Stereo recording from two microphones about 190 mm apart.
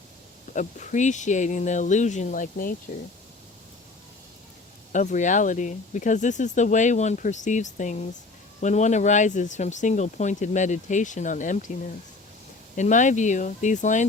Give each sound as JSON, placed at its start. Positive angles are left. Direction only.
{"t": 0.5, "sound": "speech", "side_deg": 40}
{"t": 4.9, "sound": "speech", "side_deg": 40}
{"t": 12.7, "sound": "speech", "side_deg": 40}